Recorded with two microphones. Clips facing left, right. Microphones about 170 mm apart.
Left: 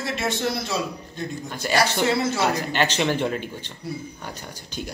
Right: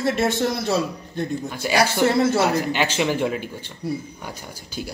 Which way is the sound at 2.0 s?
55° right (ahead or behind).